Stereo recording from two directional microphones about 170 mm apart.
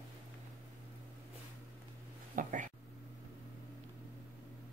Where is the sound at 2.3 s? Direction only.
50° right (ahead or behind).